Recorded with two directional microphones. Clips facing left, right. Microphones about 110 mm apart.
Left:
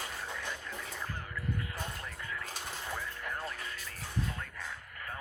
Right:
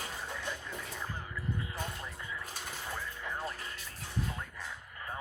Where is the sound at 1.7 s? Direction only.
25° right (ahead or behind).